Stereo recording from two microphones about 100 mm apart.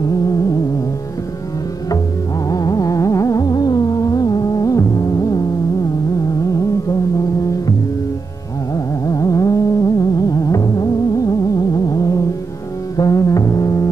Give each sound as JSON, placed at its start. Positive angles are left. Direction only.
{"t": 2.5, "sound": "music", "side_deg": 40}
{"t": 8.7, "sound": "music", "side_deg": 35}